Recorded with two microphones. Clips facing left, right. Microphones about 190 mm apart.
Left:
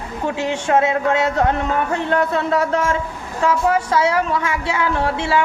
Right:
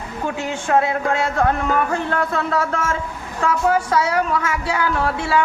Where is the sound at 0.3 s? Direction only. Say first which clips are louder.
Left 2 dB; 25° left (ahead or behind).